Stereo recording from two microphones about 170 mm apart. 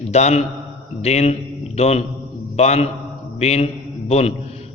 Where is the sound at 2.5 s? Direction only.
40° left (ahead or behind).